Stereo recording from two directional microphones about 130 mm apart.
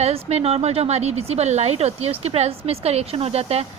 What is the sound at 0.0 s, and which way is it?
Speech, 55° right (ahead or behind).